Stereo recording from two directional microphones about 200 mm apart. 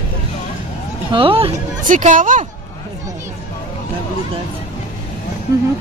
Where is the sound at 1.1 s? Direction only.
25° right (ahead or behind).